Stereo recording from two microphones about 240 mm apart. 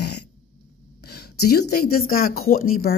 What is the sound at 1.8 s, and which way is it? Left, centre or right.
Speech, left.